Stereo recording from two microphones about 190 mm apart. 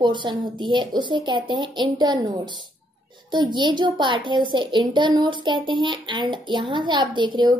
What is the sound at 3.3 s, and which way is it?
A woman's voice, 25° right (ahead or behind).